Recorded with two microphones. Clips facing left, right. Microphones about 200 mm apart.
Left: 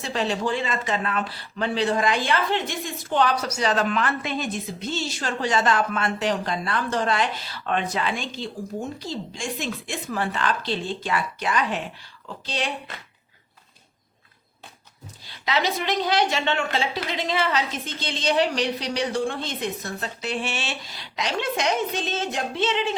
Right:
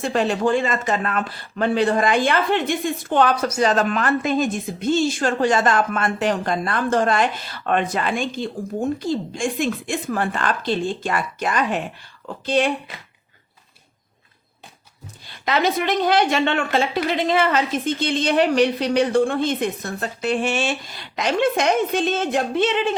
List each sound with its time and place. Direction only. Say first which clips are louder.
0.0 s speech: right 6 dB; 50° right (ahead or behind)
15.3 s speech: right 4 dB; 50° right (ahead or behind)